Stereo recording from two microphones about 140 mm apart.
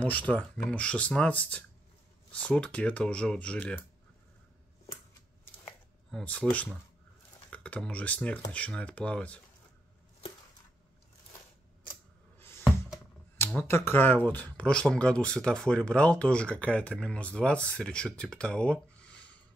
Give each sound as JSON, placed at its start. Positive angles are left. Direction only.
{"t": 0.0, "sound": "speech", "side_deg": 10}
{"t": 6.1, "sound": "speech", "side_deg": 10}
{"t": 12.4, "sound": "a sound", "side_deg": 15}
{"t": 13.5, "sound": "speech", "side_deg": 15}